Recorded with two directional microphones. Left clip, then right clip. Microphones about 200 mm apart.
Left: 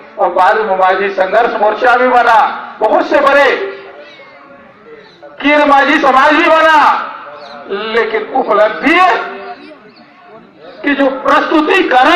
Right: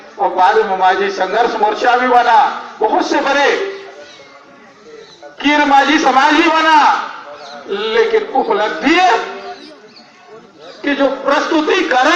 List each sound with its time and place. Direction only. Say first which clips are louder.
0.2 s a man's voice: left 2 dB; centre (ahead or behind)
5.4 s a man's voice: left 3 dB; 10° right (ahead or behind)
10.8 s a woman's voice: left 3 dB; 30° right (ahead or behind)